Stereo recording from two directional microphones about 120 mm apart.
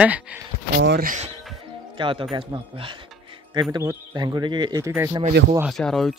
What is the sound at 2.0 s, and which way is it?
Speech, 45° right (ahead or behind).